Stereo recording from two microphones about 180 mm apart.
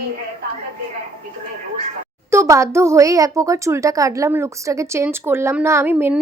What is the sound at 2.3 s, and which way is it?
A woman's voice, 15° right (ahead or behind).